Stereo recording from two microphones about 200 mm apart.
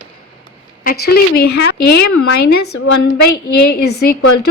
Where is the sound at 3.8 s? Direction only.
55° left (ahead or behind).